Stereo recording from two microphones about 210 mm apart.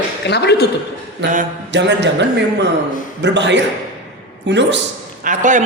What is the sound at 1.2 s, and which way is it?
A man's voice, 55° right (ahead or behind).